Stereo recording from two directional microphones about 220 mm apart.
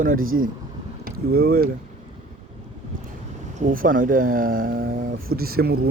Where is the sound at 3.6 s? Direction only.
40° right (ahead or behind).